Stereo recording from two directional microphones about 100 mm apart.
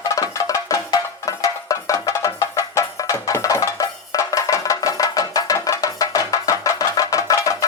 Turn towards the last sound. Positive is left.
turn(degrees=35)  # may be behind; listen again after turning